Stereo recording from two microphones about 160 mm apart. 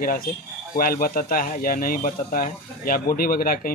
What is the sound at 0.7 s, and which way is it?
Speech, 65° left (ahead or behind).